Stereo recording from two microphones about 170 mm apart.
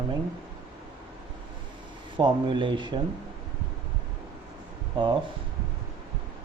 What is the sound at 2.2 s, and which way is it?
Speech, 30° right (ahead or behind).